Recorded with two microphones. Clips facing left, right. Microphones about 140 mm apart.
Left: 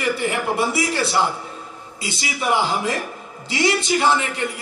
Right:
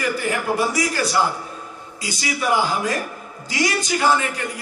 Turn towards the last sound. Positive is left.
turn(degrees=25)  # may be behind; listen again after turning